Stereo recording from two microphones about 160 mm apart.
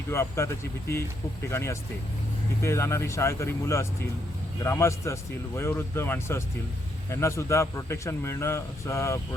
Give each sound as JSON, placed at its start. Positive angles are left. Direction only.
{"t": 0.1, "sound": "a man's voice", "side_deg": 15}